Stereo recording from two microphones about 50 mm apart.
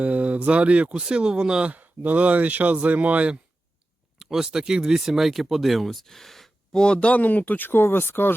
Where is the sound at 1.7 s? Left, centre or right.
Right.